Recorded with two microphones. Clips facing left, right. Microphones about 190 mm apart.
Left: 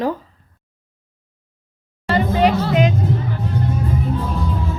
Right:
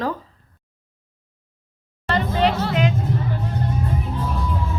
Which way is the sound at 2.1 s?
10° left (ahead or behind).